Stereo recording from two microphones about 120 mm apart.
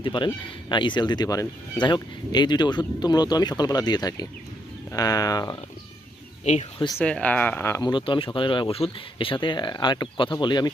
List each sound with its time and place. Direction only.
0.0 s speech: 40° left (ahead or behind)
6.4 s speech: 70° left (ahead or behind)
7.0 s speech: 10° left (ahead or behind)
7.9 s speech: 40° left (ahead or behind)